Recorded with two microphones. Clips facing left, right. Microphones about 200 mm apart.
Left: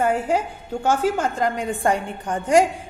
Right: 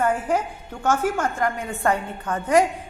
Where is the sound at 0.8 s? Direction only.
30° left (ahead or behind).